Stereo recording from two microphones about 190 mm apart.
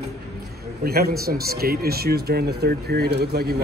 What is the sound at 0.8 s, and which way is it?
Speech, 55° right (ahead or behind).